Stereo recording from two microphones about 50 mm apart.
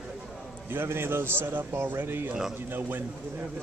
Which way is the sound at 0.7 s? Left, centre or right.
Right.